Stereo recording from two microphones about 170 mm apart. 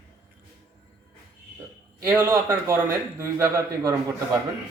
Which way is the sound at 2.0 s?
15° right (ahead or behind).